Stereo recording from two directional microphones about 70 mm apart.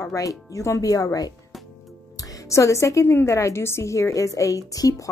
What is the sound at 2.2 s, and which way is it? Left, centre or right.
A woman's voice, left.